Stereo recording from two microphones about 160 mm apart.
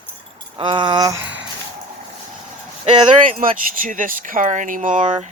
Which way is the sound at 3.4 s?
55° right (ahead or behind).